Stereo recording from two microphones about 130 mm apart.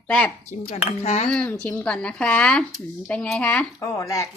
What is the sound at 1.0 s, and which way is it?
Speech, 60° left (ahead or behind).